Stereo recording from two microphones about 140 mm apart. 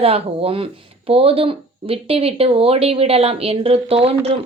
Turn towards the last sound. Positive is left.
turn(degrees=-45)  # may be behind; listen again after turning